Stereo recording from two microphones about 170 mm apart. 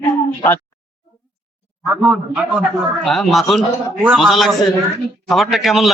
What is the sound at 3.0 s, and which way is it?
A man's voice, centre (ahead or behind).